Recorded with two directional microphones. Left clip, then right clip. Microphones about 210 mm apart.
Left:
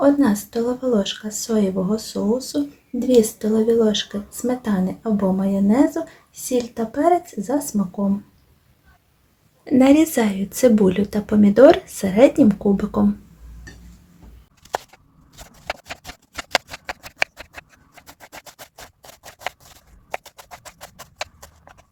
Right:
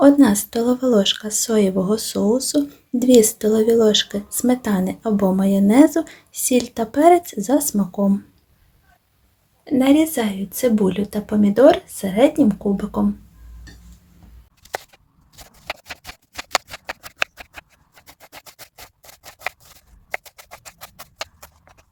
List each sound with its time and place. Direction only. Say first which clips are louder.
0.0 s speech: right 4 dB; 35° right (ahead or behind)
9.6 s a woman's voice: left 1 dB; 10° left (ahead or behind)